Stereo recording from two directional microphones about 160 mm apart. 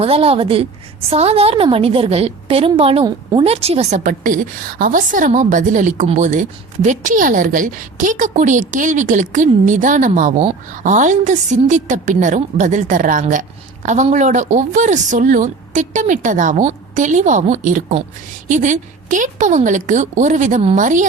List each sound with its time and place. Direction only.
0.0 s a woman's voice: 35° right (ahead or behind)